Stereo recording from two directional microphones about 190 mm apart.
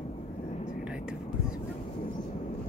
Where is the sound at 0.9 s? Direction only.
5° right (ahead or behind).